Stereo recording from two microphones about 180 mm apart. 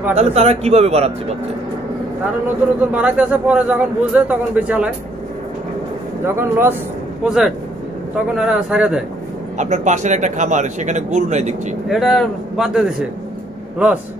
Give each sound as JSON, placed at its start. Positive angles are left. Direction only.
{"t": 0.1, "sound": "speech", "side_deg": -40}
{"t": 2.9, "sound": "a man's voice", "side_deg": -5}
{"t": 6.2, "sound": "a man's voice", "side_deg": -15}
{"t": 9.6, "sound": "speech", "side_deg": -40}
{"t": 11.9, "sound": "speech", "side_deg": 0}